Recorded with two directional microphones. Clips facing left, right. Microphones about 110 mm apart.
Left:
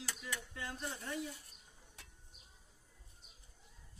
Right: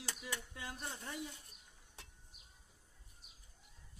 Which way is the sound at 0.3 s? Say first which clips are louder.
Left 2 dB; 20° right (ahead or behind).